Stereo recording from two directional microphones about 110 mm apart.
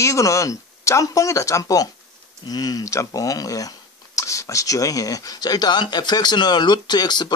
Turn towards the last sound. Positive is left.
turn(degrees=40)  # may be behind; listen again after turning